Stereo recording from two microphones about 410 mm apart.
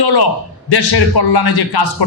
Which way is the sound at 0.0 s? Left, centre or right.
Left.